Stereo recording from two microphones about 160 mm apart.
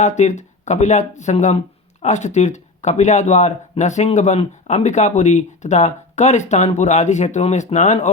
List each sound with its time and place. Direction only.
0.0 s speech: 45° left (ahead or behind)